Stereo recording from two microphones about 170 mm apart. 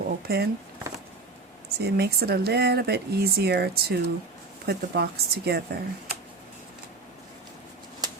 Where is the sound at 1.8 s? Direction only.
70° right (ahead or behind).